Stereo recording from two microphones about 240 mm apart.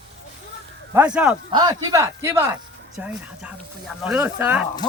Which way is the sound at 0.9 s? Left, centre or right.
Centre.